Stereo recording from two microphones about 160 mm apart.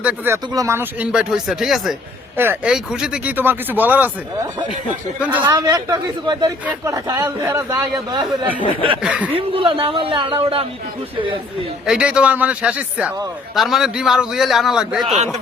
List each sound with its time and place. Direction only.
0.0 s speech: 10° right (ahead or behind)
0.5 s a man's voice: 20° right (ahead or behind)
5.4 s speech: 20° right (ahead or behind)
9.0 s a man's voice: 5° right (ahead or behind)
9.3 s a woman's voice: 35° right (ahead or behind)
11.9 s a man's voice: 5° right (ahead or behind)